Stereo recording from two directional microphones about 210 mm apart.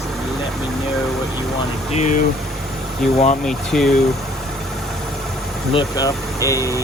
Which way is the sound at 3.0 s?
Centre (ahead or behind).